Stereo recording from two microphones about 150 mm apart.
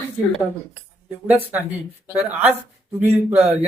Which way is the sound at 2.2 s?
10° right (ahead or behind).